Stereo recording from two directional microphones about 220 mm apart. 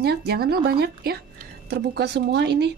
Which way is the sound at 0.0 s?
45° right (ahead or behind).